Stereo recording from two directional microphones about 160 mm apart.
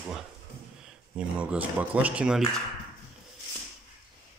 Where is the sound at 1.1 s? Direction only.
10° right (ahead or behind).